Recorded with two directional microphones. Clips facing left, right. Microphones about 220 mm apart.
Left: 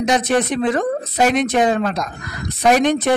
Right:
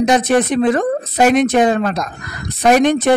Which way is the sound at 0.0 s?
50° right (ahead or behind).